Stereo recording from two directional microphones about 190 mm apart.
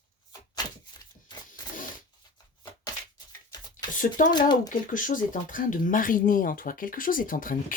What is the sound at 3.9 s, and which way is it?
Speech, 45° left (ahead or behind).